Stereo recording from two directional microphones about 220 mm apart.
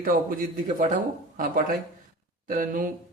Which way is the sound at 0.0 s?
40° right (ahead or behind).